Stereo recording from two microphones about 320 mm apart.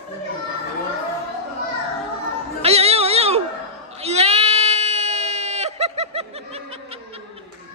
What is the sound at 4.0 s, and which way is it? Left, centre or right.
Sheep, centre.